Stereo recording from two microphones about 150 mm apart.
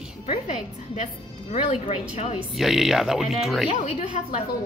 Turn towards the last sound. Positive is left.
turn(degrees=50)  # may be behind; listen again after turning